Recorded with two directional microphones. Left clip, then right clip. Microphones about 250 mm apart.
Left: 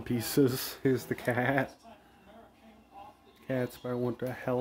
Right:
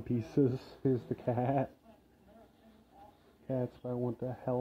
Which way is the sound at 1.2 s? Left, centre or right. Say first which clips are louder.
Left 4 dB; left.